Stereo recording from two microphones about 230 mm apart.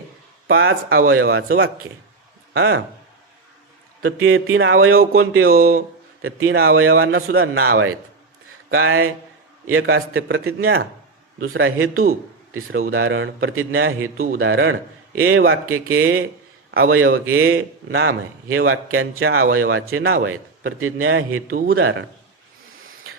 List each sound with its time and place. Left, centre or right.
0.4 s a man's voice: right
4.0 s a man's voice: right